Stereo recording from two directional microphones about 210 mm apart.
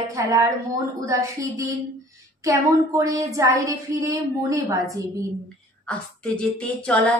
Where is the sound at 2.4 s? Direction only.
15° right (ahead or behind).